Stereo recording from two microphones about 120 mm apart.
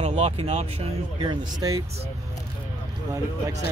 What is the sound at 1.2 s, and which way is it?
Speech, 30° right (ahead or behind).